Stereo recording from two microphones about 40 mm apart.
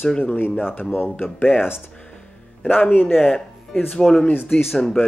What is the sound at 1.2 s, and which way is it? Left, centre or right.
Speech, left.